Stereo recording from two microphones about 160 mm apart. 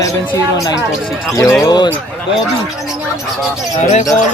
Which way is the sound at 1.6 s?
25° left (ahead or behind).